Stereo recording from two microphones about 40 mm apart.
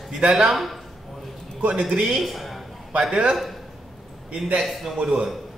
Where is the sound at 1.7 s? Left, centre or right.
Centre.